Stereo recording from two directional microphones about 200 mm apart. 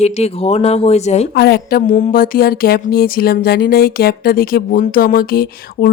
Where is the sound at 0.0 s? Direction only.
30° left (ahead or behind).